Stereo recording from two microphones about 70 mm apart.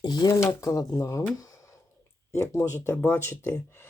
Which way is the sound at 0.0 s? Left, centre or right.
Left.